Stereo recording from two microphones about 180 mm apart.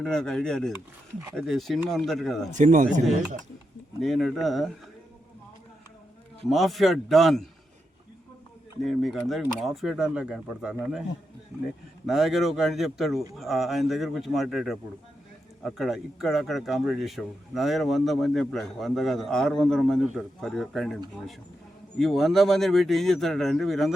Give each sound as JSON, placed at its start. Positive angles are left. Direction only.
{"t": 0.0, "sound": "speech", "side_deg": 5}
{"t": 2.6, "sound": "speech", "side_deg": -45}
{"t": 4.0, "sound": "speech", "side_deg": 0}
{"t": 6.5, "sound": "speech", "side_deg": 0}
{"t": 8.9, "sound": "speech", "side_deg": 0}